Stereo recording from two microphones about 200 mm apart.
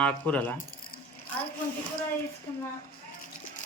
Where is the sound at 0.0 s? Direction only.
5° left (ahead or behind).